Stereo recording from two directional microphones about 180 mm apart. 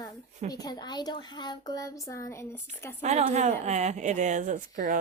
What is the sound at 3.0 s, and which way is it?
A woman's voice, 40° right (ahead or behind).